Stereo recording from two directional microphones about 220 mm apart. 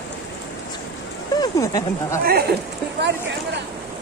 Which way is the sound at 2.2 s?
45° right (ahead or behind).